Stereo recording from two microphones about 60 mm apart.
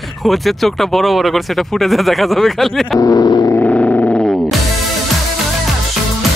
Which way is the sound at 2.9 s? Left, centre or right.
Left.